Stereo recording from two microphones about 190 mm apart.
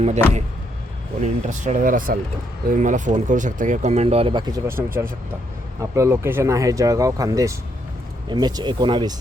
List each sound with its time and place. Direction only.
1.2 s speech: 40° right (ahead or behind); by 9.1 s 25° right (ahead or behind)